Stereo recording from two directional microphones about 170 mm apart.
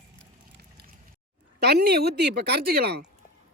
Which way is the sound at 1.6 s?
70° right (ahead or behind).